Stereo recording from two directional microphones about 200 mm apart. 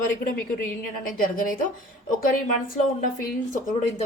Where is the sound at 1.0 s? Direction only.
45° left (ahead or behind).